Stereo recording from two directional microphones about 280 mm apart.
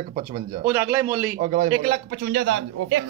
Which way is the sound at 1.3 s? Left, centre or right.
Right.